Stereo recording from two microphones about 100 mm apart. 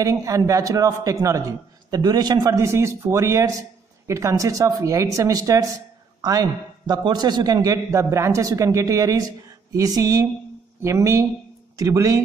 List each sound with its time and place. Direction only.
0.0 s a man's voice: 35° right (ahead or behind)
6.9 s a man's voice: 45° right (ahead or behind)